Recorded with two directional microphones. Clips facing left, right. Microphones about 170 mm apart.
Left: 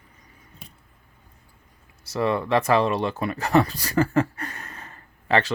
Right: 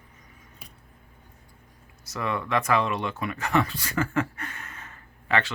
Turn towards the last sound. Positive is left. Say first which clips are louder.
# left 4 dB
turn(degrees=35)  # may be behind; listen again after turning